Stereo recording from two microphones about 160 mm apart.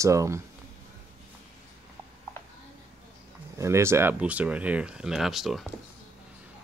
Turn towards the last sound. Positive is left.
turn(degrees=0)  # may be behind; listen again after turning